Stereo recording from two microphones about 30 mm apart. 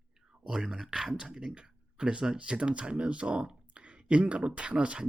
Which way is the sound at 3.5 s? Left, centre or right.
Right.